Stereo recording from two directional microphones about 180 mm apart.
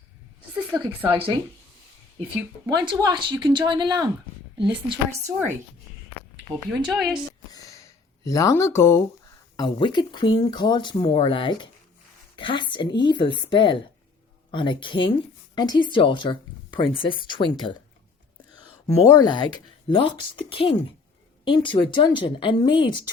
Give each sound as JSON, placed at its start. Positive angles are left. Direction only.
{"t": 0.7, "sound": "speech", "side_deg": -10}
{"t": 2.6, "sound": "speech", "side_deg": -25}
{"t": 6.8, "sound": "speech", "side_deg": -5}
{"t": 7.5, "sound": "a sound", "side_deg": 20}
{"t": 9.6, "sound": "speech", "side_deg": 25}
{"t": 18.9, "sound": "speech", "side_deg": 20}